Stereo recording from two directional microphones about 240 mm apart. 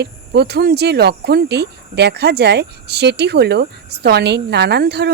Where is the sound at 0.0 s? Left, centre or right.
Right.